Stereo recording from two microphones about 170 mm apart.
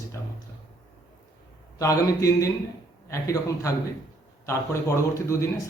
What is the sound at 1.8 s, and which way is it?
A man's voice, 20° left (ahead or behind).